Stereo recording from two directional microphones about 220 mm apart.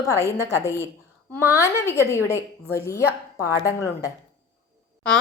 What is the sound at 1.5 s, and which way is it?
Speech, 15° left (ahead or behind).